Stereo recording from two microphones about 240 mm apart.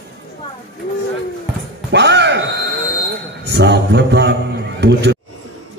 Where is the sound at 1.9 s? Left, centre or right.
Right.